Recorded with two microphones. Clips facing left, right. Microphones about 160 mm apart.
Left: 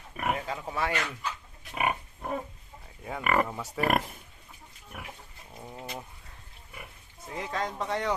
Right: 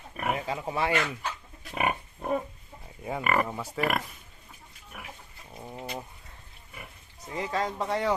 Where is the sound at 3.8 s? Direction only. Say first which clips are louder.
Left 2 dB; 40° left (ahead or behind).